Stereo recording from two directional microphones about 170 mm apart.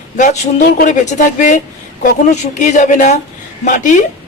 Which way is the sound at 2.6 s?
45° left (ahead or behind).